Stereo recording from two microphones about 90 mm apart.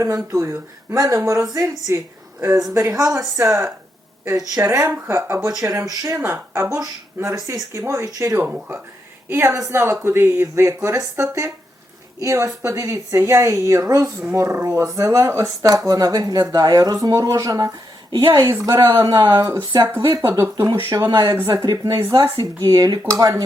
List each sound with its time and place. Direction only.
0.0 s speech: 35° right (ahead or behind)
3.0 s speech: 40° right (ahead or behind)
5.9 s speech: 45° right (ahead or behind)
6.2 s speech: 25° right (ahead or behind)
8.4 s speech: 20° right (ahead or behind); by 17.7 s 40° right (ahead or behind)
18.1 s a woman's voice: 60° right (ahead or behind)
18.4 s speech: 35° right (ahead or behind)